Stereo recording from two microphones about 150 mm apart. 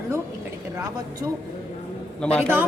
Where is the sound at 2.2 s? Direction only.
5° left (ahead or behind).